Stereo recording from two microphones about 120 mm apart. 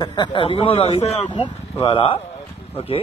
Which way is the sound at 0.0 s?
40° left (ahead or behind).